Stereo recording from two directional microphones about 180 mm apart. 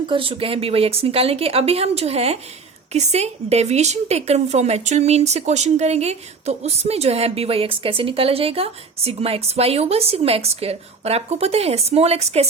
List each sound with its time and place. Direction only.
0.1 s a woman's voice: 30° right (ahead or behind)